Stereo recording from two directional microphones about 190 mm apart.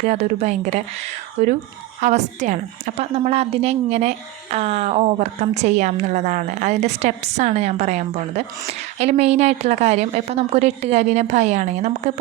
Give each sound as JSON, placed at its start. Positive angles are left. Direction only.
{"t": 0.0, "sound": "a woman's voice", "side_deg": -35}